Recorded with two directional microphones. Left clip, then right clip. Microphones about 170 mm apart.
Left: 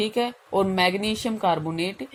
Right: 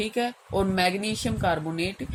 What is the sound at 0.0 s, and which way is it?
A woman's voice, 25° left (ahead or behind).